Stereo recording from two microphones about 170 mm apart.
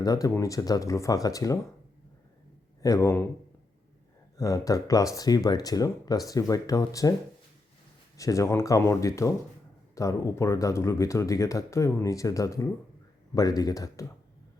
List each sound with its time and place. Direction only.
0.0 s speech: 20° left (ahead or behind)
2.8 s a man's voice: 20° left (ahead or behind)
4.4 s speech: 20° left (ahead or behind)
8.1 s speech: 20° left (ahead or behind)